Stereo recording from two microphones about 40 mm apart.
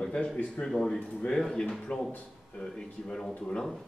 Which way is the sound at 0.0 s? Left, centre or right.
Centre.